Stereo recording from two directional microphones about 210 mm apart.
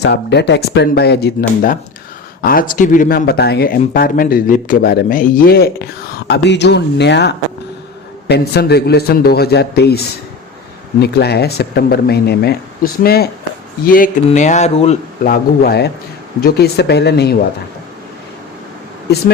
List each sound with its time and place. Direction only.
0.0 s speech: 55° left (ahead or behind)
11.0 s speech: 50° left (ahead or behind)
14.3 s a sound: 35° left (ahead or behind)
15.2 s speech: 45° left (ahead or behind)